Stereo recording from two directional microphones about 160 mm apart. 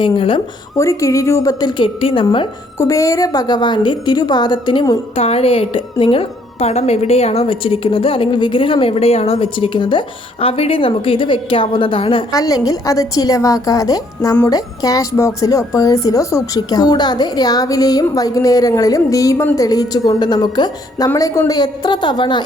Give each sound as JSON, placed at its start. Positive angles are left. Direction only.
{"t": 0.0, "sound": "a woman's voice", "side_deg": 30}
{"t": 0.8, "sound": "speech", "side_deg": 20}
{"t": 2.7, "sound": "a woman's voice", "side_deg": 20}
{"t": 12.3, "sound": "speech", "side_deg": 20}